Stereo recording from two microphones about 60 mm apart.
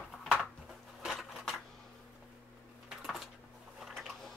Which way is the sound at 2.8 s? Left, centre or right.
Centre.